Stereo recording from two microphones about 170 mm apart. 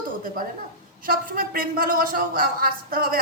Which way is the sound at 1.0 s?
55° right (ahead or behind).